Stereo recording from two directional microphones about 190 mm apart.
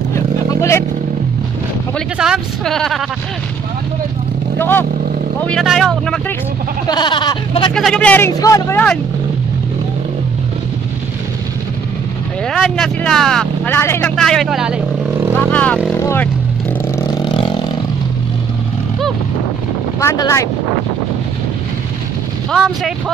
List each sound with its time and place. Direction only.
0.1 s vehicle: 15° left (ahead or behind)
2.1 s speech: 5° right (ahead or behind)
4.6 s speech: 10° left (ahead or behind)
6.9 s speech: 25° left (ahead or behind)
7.7 s speech: 5° left (ahead or behind)
12.4 s speech: centre (ahead or behind)
14.1 s speech: centre (ahead or behind)
15.3 s speech: 10° left (ahead or behind)
17.0 s vehicle: 20° left (ahead or behind)
20.0 s speech: 15° left (ahead or behind)
22.5 s speech: centre (ahead or behind)